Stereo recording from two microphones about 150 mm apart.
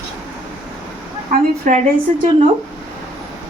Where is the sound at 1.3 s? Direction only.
60° right (ahead or behind).